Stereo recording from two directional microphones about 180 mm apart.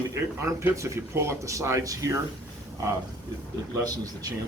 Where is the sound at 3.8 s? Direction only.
20° right (ahead or behind).